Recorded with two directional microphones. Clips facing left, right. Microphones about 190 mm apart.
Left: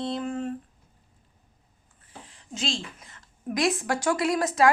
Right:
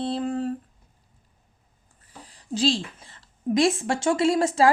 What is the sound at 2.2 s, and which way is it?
A woman's voice, 35° right (ahead or behind).